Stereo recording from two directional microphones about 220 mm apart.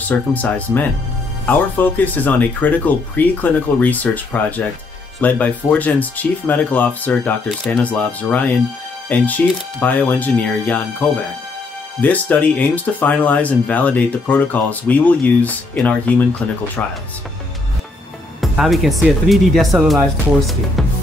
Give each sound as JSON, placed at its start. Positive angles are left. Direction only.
{"t": 0.1, "sound": "speech", "side_deg": 5}
{"t": 18.4, "sound": "speech", "side_deg": 0}